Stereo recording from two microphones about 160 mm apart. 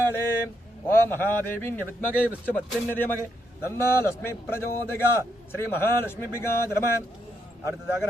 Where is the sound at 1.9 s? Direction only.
10° right (ahead or behind).